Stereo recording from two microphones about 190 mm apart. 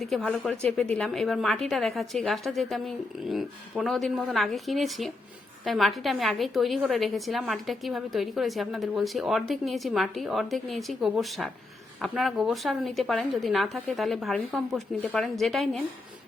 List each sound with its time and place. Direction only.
0.0 s a woman's voice: centre (ahead or behind)